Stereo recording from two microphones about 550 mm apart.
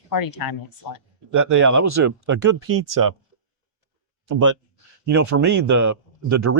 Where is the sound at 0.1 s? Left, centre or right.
Left.